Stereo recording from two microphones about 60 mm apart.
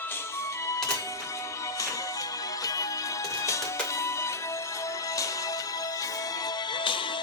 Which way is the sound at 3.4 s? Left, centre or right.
Left.